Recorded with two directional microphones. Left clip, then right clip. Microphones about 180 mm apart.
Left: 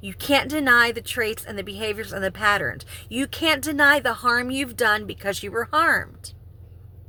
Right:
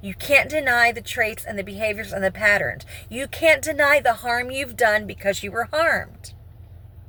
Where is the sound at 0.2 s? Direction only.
20° left (ahead or behind).